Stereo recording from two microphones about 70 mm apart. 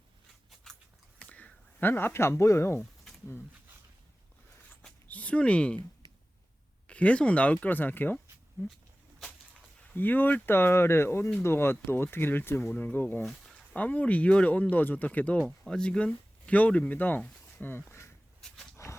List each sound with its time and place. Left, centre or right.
0.7 s biting: centre
1.2 s a sound: left
1.9 s speech: left
4.8 s a sound: left
6.8 s speech: centre
9.9 s speech: left
15.6 s speech: centre
17.7 s a sound: left
18.8 s wild animals: left